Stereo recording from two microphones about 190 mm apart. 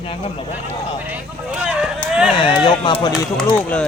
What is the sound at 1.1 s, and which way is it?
Speech, 5° right (ahead or behind).